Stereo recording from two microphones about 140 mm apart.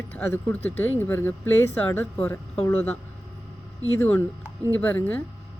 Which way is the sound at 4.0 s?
15° left (ahead or behind).